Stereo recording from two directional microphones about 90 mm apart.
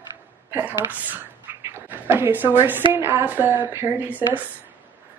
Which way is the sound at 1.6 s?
25° right (ahead or behind).